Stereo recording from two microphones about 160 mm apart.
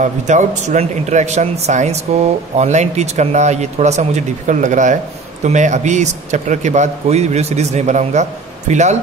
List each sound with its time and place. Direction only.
0.0 s speech: 50° right (ahead or behind)